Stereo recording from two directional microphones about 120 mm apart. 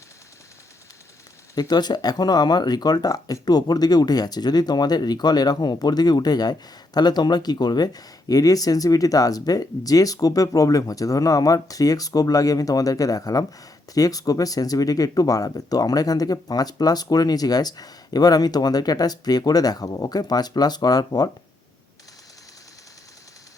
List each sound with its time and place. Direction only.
1.5 s speech: 35° left (ahead or behind)